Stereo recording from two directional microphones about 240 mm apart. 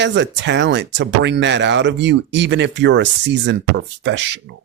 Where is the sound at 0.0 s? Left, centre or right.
Right.